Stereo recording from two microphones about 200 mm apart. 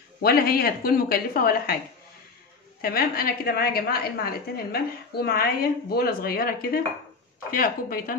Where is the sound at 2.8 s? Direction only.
50° left (ahead or behind).